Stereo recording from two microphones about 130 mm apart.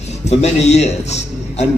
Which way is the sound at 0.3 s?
60° left (ahead or behind).